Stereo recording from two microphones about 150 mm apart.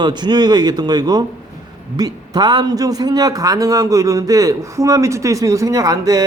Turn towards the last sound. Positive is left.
turn(degrees=-25)  # may be behind; listen again after turning